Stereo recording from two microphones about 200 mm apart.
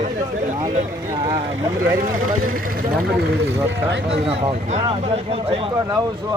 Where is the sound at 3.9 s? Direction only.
65° right (ahead or behind).